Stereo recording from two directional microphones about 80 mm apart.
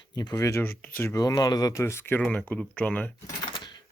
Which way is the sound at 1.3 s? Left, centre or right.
Left.